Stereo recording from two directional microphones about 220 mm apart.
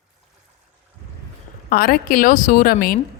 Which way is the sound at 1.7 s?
40° left (ahead or behind).